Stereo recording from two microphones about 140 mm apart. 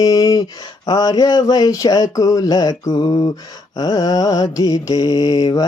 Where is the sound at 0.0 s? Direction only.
25° left (ahead or behind).